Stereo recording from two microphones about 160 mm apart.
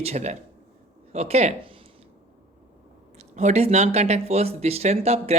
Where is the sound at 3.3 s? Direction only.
45° right (ahead or behind).